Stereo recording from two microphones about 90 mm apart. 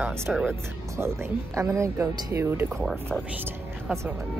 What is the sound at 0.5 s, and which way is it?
Speech, 30° right (ahead or behind).